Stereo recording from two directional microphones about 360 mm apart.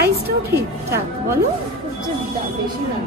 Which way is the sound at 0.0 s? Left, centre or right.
Right.